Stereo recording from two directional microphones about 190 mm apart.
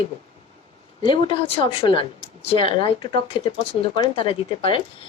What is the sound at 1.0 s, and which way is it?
A woman's voice, 25° left (ahead or behind).